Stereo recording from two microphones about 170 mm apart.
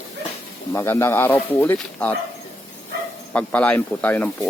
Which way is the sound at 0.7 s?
15° left (ahead or behind).